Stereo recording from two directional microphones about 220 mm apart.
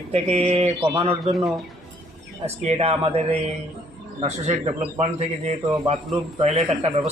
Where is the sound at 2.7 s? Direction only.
25° right (ahead or behind).